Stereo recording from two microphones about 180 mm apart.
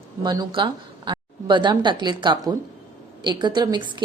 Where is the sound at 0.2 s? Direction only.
25° right (ahead or behind).